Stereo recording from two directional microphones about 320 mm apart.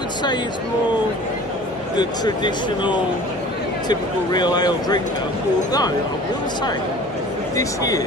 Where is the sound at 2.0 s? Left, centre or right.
Centre.